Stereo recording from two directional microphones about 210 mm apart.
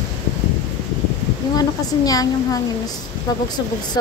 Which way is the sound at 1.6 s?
15° left (ahead or behind).